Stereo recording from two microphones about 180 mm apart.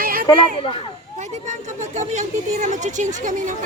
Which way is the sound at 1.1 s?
40° right (ahead or behind).